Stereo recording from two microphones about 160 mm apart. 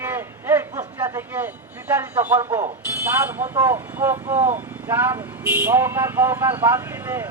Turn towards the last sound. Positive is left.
turn(degrees=-10)  # may be behind; listen again after turning